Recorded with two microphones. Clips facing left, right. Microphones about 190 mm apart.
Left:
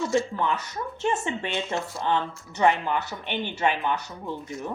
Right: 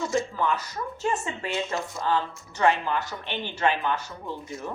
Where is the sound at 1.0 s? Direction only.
25° left (ahead or behind).